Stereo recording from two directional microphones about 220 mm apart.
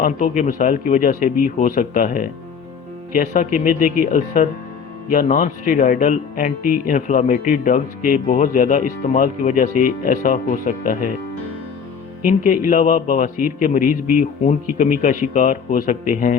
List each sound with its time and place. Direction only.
0.0 s speech: 35° left (ahead or behind)
12.3 s speech: 35° left (ahead or behind)